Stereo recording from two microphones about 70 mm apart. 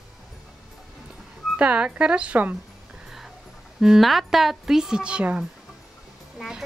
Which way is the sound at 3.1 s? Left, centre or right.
Centre.